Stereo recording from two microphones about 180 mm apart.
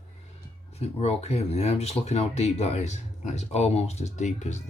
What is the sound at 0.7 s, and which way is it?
Speech, 35° left (ahead or behind).